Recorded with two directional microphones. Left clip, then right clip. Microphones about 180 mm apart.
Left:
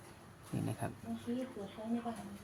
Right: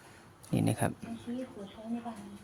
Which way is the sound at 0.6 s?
65° right (ahead or behind).